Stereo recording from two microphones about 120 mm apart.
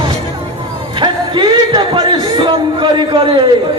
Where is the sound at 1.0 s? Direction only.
40° right (ahead or behind).